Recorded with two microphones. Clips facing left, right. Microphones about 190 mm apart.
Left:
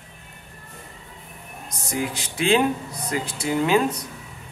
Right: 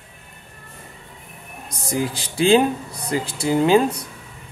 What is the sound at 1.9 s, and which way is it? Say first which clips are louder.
Speech: right 3 dB; 30° right (ahead or behind).